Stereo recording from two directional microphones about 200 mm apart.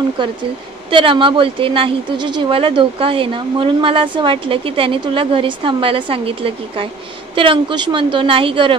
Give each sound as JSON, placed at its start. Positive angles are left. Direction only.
{"t": 0.2, "sound": "speech", "side_deg": -25}